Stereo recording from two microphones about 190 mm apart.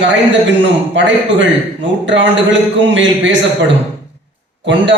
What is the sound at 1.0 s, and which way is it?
A man's voice, 70° right (ahead or behind).